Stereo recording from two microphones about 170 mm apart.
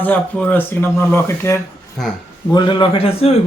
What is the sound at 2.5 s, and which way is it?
Speech, 25° left (ahead or behind).